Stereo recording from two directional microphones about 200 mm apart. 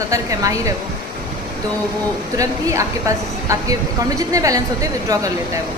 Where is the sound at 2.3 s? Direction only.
15° right (ahead or behind).